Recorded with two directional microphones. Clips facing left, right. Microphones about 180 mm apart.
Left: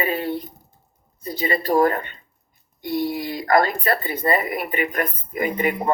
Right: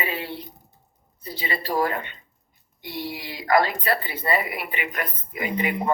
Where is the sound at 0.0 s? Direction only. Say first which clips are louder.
Left 6 dB; 45° left (ahead or behind).